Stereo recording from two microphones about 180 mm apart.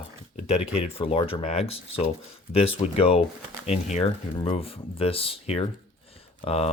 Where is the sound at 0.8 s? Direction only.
35° left (ahead or behind).